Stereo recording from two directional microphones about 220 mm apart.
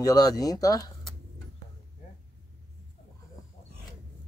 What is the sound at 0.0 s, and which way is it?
Speech, 15° left (ahead or behind).